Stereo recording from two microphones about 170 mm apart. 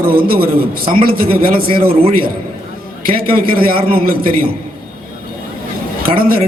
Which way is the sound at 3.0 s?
60° right (ahead or behind).